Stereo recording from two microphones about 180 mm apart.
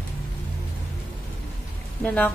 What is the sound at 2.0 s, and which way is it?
Speech, 10° left (ahead or behind).